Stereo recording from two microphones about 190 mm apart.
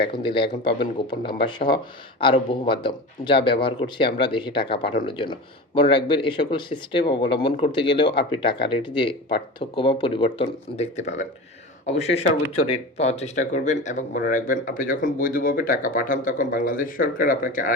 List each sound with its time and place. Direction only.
0.1 s speech: 25° left (ahead or behind); by 17.7 s 45° left (ahead or behind)